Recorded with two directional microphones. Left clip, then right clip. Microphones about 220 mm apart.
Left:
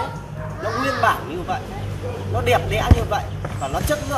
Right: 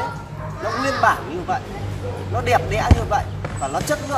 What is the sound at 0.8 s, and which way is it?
Speech, 5° left (ahead or behind).